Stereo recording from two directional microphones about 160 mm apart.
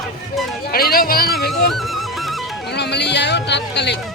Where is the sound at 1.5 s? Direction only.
Centre (ahead or behind).